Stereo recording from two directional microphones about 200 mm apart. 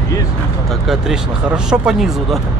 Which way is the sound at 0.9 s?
5° right (ahead or behind).